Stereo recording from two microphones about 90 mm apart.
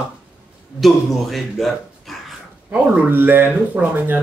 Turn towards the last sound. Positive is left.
turn(degrees=-25)  # may be behind; listen again after turning